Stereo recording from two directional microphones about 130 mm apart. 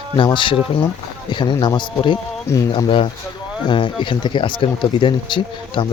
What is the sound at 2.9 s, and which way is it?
Speech, 40° left (ahead or behind).